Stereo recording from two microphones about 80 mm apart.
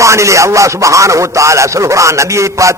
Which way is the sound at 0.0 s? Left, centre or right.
Right.